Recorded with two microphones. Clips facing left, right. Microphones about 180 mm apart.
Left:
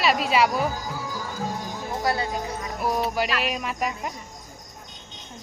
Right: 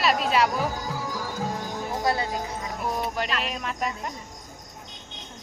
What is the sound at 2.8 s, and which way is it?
Music, 10° left (ahead or behind).